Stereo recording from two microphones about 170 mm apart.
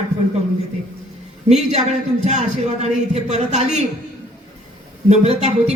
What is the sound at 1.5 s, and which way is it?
A man's voice, 40° right (ahead or behind).